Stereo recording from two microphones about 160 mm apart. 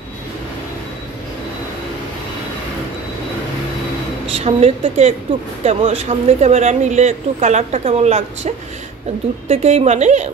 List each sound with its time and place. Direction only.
4.3 s a woman's voice: 40° right (ahead or behind)